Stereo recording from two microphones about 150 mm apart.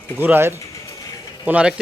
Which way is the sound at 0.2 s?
15° right (ahead or behind).